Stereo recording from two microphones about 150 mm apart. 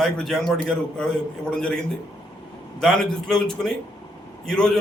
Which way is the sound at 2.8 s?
5° left (ahead or behind).